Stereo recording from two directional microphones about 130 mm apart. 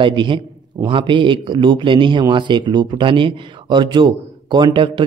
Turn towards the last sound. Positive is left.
turn(degrees=-35)  # may be behind; listen again after turning